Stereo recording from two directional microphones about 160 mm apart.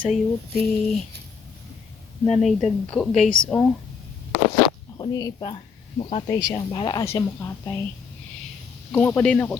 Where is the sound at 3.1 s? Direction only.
45° left (ahead or behind).